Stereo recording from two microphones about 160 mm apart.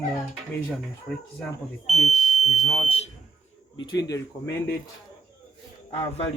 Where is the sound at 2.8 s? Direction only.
40° left (ahead or behind).